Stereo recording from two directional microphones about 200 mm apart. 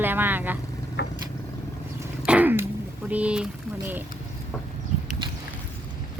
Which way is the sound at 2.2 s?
5° right (ahead or behind).